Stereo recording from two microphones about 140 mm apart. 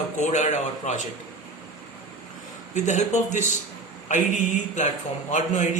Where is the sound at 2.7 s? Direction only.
60° left (ahead or behind).